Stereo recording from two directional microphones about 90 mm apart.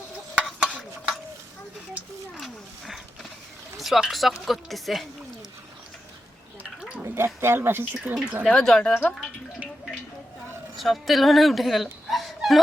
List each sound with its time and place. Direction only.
0.8 s stir: centre (ahead or behind)
2.4 s roaring cats: centre (ahead or behind)
3.8 s speech: centre (ahead or behind)
6.6 s gargling: 15° right (ahead or behind)
7.0 s gargling: 30° right (ahead or behind)
7.4 s speech: 25° right (ahead or behind)
8.1 s speech: 10° right (ahead or behind)
8.4 s speech: 5° left (ahead or behind)
10.8 s speech: centre (ahead or behind)